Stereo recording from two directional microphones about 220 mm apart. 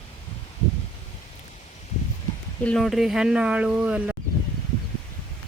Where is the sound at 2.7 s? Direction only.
Centre (ahead or behind).